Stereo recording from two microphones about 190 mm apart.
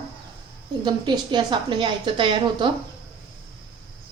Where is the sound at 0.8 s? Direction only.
25° right (ahead or behind).